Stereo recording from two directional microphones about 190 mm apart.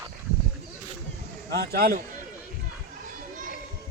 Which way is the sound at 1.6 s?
50° right (ahead or behind).